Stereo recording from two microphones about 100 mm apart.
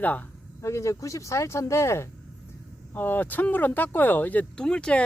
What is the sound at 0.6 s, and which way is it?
Speech, 30° left (ahead or behind).